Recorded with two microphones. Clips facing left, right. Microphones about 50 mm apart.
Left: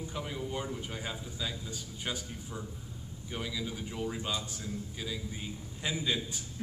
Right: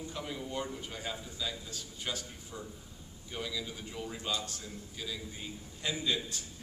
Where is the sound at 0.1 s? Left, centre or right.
Centre.